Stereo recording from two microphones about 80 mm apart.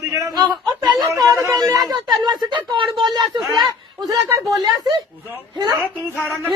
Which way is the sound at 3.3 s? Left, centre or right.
Centre.